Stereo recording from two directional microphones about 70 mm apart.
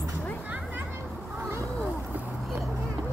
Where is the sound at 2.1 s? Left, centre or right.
Right.